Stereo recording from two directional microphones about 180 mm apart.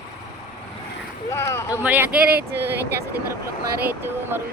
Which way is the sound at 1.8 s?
10° right (ahead or behind).